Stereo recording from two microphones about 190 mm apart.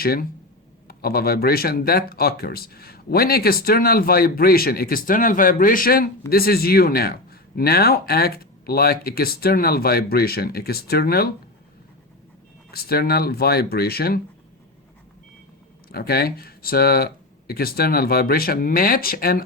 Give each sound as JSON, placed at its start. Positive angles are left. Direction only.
{"t": 0.0, "sound": "speech", "side_deg": 50}
{"t": 12.7, "sound": "speech", "side_deg": 55}
{"t": 15.9, "sound": "speech", "side_deg": 55}